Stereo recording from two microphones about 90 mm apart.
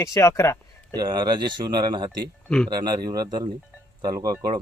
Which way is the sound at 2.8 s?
50° right (ahead or behind).